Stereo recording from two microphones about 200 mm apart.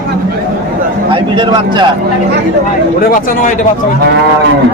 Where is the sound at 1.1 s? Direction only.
25° right (ahead or behind).